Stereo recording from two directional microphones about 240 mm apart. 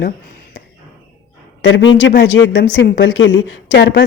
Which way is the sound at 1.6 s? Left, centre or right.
Left.